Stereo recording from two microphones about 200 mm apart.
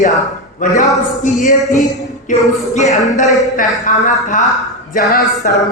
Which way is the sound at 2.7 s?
35° left (ahead or behind).